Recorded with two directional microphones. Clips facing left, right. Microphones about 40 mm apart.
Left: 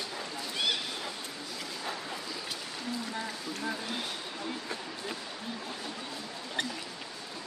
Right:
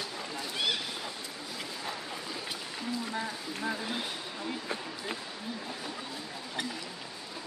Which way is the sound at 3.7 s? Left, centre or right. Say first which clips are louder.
Right 3 dB; centre.